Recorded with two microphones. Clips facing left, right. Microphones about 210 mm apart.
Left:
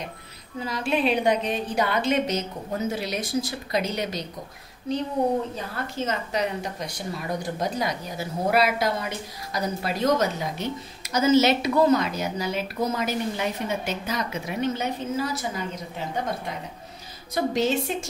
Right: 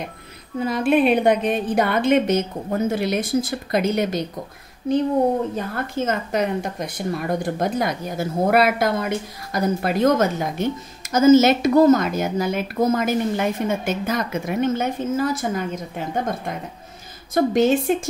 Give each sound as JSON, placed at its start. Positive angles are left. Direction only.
{"t": 0.6, "sound": "speech", "side_deg": -55}
{"t": 17.3, "sound": "speech", "side_deg": -50}